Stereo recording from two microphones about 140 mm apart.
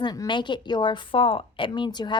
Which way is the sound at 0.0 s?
30° left (ahead or behind).